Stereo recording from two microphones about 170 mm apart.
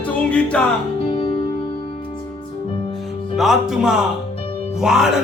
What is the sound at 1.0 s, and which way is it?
Music, 30° left (ahead or behind).